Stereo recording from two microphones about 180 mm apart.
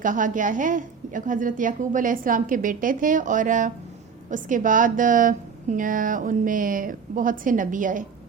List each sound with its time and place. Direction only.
0.0 s a woman's voice: 45° right (ahead or behind)